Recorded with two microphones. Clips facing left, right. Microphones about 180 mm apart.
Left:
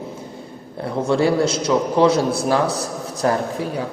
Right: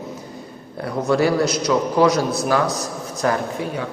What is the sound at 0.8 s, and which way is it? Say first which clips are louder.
A man's voice: even; 25° left (ahead or behind).